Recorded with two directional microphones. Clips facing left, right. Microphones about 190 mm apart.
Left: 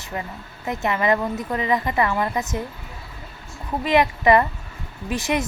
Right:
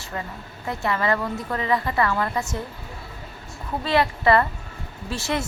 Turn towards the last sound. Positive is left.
turn(degrees=15)  # may be behind; listen again after turning